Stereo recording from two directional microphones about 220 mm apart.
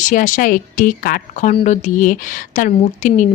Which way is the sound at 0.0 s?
35° left (ahead or behind).